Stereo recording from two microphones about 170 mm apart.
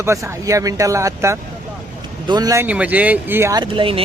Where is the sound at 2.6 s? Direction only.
10° right (ahead or behind); by 4.0 s 30° right (ahead or behind).